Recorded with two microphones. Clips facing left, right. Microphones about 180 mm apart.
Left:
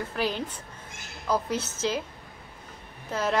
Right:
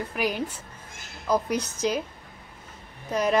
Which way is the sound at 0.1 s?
10° right (ahead or behind).